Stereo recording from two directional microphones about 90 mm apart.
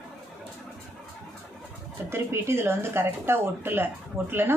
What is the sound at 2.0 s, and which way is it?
Speech, 30° right (ahead or behind).